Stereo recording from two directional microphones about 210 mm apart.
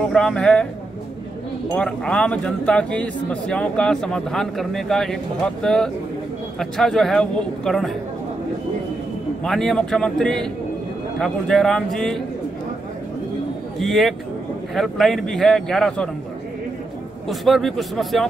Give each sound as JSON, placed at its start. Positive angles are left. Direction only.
{"t": 0.1, "sound": "speech", "side_deg": 5}
{"t": 1.7, "sound": "speech", "side_deg": 5}
{"t": 9.4, "sound": "speech", "side_deg": 0}
{"t": 13.7, "sound": "speech", "side_deg": 0}
{"t": 17.3, "sound": "speech", "side_deg": 0}